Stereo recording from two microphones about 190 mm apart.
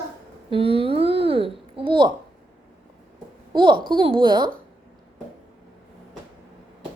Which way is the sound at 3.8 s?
25° right (ahead or behind).